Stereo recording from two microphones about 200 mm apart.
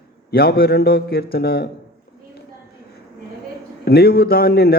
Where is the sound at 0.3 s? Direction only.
50° left (ahead or behind).